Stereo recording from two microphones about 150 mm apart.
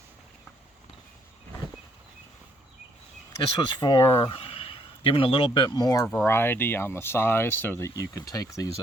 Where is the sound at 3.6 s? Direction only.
30° left (ahead or behind).